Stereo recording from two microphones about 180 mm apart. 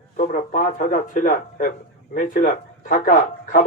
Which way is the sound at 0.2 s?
45° left (ahead or behind).